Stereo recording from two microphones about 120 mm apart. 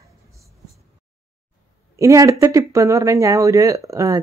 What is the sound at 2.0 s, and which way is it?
Speech, 25° right (ahead or behind).